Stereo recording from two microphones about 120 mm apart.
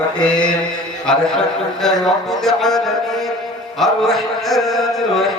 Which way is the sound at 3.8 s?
Centre (ahead or behind).